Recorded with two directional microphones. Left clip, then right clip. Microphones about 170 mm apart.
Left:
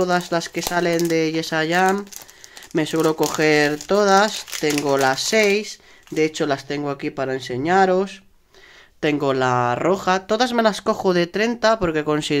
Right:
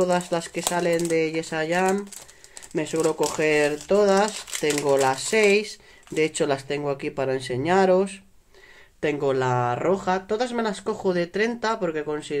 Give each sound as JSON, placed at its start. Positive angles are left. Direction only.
{"t": 0.0, "sound": "speech", "side_deg": 25}
{"t": 9.0, "sound": "speech", "side_deg": 30}